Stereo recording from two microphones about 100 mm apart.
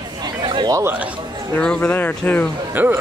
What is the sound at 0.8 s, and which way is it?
Speech, 20° right (ahead or behind).